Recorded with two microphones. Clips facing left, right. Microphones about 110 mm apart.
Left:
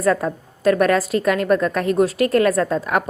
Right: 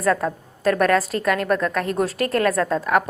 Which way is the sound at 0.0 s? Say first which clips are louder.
Left 2 dB; 10° left (ahead or behind).